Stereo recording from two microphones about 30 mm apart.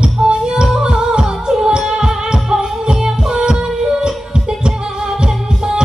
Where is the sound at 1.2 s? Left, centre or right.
Centre.